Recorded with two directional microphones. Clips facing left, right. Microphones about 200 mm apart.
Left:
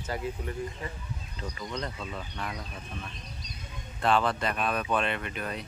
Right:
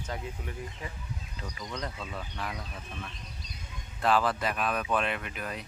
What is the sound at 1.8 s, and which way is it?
Speech, 5° right (ahead or behind).